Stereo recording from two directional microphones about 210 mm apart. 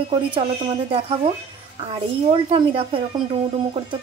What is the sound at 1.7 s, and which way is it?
A woman's voice, 25° right (ahead or behind).